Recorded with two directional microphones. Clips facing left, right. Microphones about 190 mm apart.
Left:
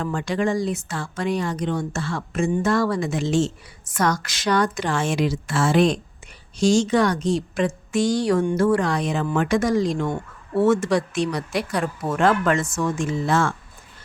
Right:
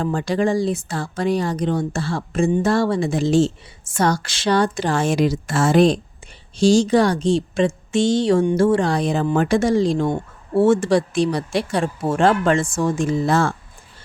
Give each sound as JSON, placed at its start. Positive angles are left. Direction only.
{"t": 0.0, "sound": "speech", "side_deg": -35}